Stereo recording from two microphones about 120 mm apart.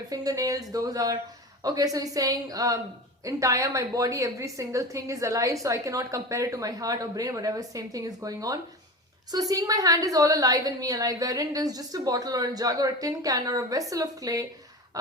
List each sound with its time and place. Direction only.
0.1 s a woman's voice: 30° right (ahead or behind)